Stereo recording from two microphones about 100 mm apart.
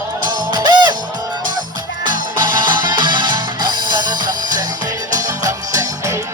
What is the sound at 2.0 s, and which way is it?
Music, 50° right (ahead or behind).